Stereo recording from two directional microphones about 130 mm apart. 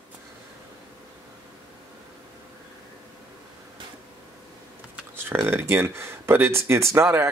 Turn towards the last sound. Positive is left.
turn(degrees=-20)  # may be behind; listen again after turning